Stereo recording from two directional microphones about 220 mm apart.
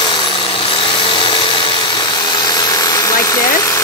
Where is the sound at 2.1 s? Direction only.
20° left (ahead or behind).